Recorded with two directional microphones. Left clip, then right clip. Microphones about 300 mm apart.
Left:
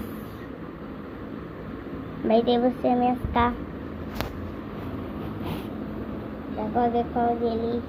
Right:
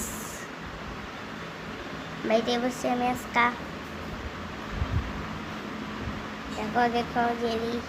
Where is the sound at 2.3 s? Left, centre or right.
Centre.